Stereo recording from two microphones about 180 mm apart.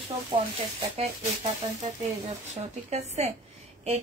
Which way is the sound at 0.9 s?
35° right (ahead or behind).